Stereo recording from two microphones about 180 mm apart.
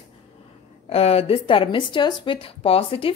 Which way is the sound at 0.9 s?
35° left (ahead or behind).